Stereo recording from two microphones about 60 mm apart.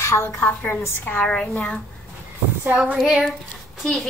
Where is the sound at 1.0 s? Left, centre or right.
Left.